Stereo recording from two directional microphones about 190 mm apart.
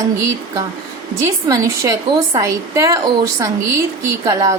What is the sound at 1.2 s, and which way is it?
A woman's voice, 15° right (ahead or behind).